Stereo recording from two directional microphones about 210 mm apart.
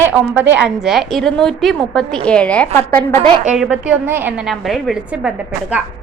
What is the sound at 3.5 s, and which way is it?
A woman's voice, 5° right (ahead or behind).